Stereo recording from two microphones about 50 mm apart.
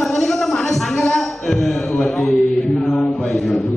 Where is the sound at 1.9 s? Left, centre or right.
Left.